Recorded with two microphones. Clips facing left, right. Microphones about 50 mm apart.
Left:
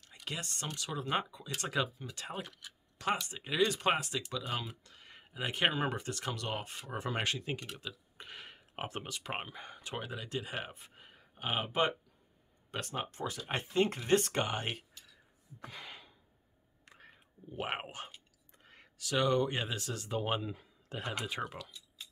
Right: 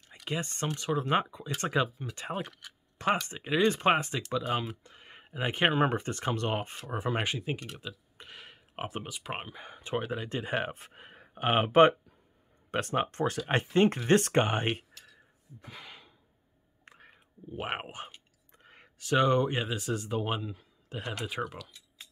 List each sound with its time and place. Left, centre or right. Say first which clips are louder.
0.2 s speech: right 7 dB; right
2.6 s a sound: right 4 dB; right
3.3 s speech: right 5 dB; centre
6.9 s speech: right 4 dB; centre
8.2 s speech: even; centre
9.8 s speech: right 9 dB; right
10.9 s speech: right 7 dB; right
15.6 s a sound: even; centre
16.9 s whispering: left 1 dB; centre
18.6 s a sound: right 3 dB; centre
18.9 s speech: right 5 dB; right
19.5 s speech: right 5 dB; centre